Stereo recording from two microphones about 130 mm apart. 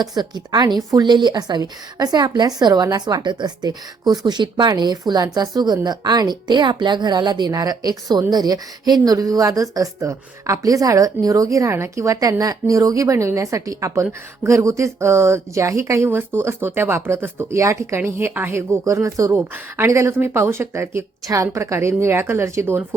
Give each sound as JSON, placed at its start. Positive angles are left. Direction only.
{"t": 0.1, "sound": "a woman's voice", "side_deg": -30}